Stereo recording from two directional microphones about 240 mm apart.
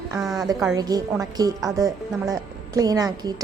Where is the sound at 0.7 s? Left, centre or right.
Centre.